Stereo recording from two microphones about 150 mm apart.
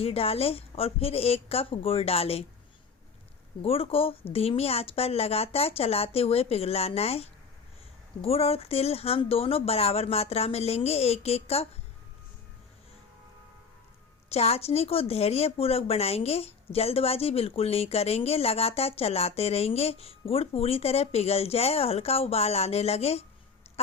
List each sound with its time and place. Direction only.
0.0 s speech: 40° left (ahead or behind)
3.6 s a woman's voice: 40° left (ahead or behind)
14.3 s a woman's voice: 45° left (ahead or behind)
23.6 s wheeze: 45° left (ahead or behind)